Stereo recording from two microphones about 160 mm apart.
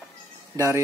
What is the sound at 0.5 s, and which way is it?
Speech, 20° right (ahead or behind).